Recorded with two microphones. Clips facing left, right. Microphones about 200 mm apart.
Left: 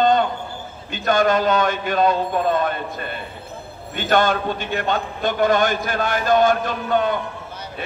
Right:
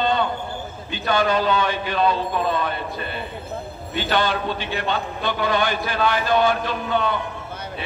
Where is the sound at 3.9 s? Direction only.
45° left (ahead or behind).